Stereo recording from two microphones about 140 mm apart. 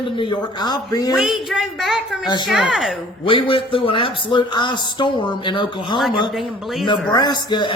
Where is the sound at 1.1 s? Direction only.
Centre (ahead or behind).